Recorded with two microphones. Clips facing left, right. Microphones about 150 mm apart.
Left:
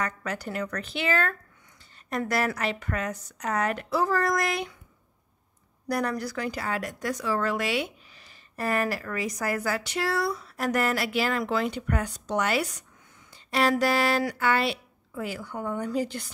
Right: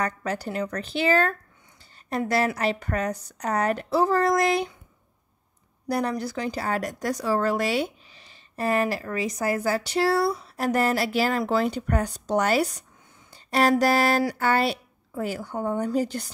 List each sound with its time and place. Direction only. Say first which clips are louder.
0.0 s speech: right 4 dB; 30° right (ahead or behind)
5.9 s speech: right 2 dB; 25° right (ahead or behind)
6.7 s speech: right 3 dB; 40° right (ahead or behind)